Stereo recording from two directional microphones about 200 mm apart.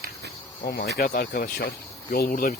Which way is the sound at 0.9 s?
45° left (ahead or behind).